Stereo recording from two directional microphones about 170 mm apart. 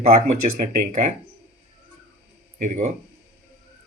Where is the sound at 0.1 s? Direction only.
60° right (ahead or behind).